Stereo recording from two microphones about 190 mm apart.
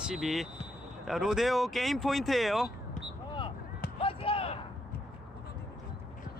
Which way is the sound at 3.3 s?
25° left (ahead or behind).